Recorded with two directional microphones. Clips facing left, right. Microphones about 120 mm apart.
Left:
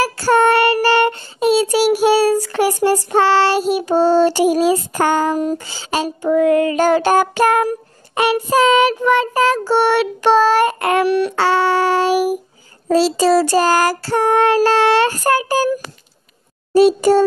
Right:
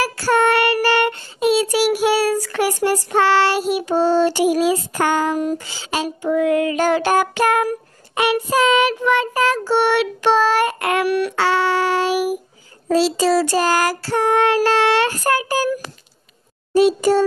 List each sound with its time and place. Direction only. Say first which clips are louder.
0.0 s child singing: left 3 dB; 35° left (ahead or behind)
16.7 s a child's voice: left 3 dB; 35° left (ahead or behind)